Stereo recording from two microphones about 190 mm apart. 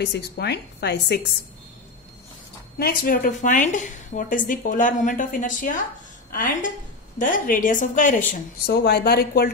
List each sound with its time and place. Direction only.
0.0 s a woman's voice: 60° left (ahead or behind)
2.8 s speech: 50° left (ahead or behind)
8.6 s a woman's voice: 60° left (ahead or behind)